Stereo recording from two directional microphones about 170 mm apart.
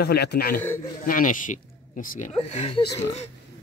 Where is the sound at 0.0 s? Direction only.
70° left (ahead or behind).